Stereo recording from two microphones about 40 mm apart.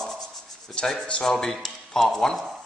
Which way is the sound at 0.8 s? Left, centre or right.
Left.